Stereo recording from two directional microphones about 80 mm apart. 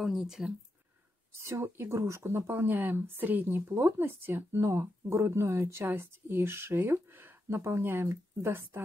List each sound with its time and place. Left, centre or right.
0.0 s speech: centre
1.4 s speech: right